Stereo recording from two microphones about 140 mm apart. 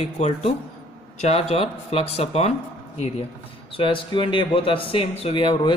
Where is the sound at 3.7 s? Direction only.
40° left (ahead or behind).